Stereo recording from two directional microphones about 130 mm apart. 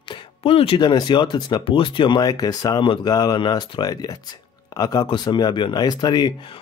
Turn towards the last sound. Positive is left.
turn(degrees=35)  # may be behind; listen again after turning